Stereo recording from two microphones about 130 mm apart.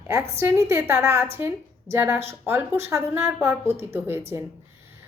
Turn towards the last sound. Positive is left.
turn(degrees=-20)  # may be behind; listen again after turning